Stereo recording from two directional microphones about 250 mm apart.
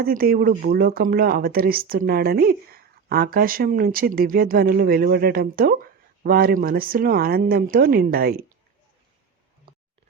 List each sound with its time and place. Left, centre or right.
0.0 s speech: right